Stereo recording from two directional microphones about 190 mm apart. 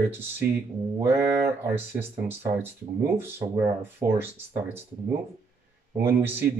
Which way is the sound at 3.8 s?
10° right (ahead or behind).